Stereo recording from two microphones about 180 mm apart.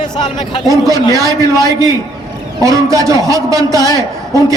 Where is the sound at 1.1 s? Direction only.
20° right (ahead or behind).